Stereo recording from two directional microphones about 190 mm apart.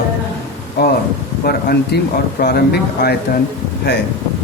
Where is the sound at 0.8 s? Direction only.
55° left (ahead or behind).